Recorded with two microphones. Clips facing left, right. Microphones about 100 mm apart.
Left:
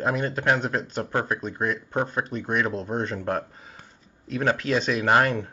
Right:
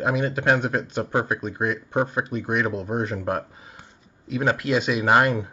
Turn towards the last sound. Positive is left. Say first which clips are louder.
# right 2 dB
turn(degrees=-10)  # may be behind; listen again after turning